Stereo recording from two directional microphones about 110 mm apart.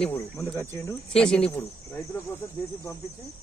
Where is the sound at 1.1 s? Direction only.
5° left (ahead or behind).